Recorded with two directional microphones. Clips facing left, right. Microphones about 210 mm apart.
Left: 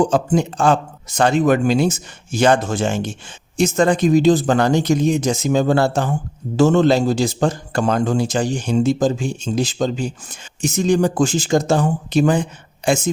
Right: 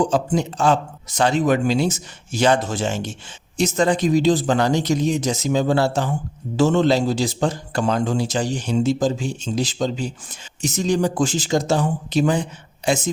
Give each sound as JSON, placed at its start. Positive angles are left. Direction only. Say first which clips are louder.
{"t": 0.1, "sound": "a man's voice", "louder": "left 3 dB", "side_deg": 50}